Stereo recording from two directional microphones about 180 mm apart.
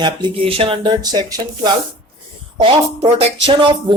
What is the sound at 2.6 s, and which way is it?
Speech, 35° right (ahead or behind).